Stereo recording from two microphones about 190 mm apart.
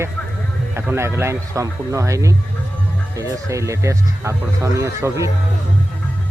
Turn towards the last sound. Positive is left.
turn(degrees=-15)  # may be behind; listen again after turning